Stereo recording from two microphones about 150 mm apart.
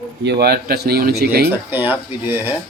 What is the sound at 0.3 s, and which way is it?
A man's voice, 90° right.